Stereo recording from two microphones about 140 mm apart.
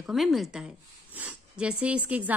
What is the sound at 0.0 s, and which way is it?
A woman's voice, centre (ahead or behind).